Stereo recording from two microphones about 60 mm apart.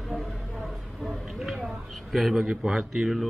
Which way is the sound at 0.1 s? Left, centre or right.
Centre.